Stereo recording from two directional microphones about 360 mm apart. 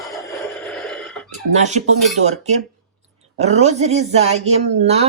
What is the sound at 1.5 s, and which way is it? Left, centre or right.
Speech, centre.